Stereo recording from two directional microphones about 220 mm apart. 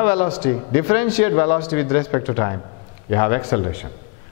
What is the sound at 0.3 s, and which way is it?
Speech, 25° left (ahead or behind).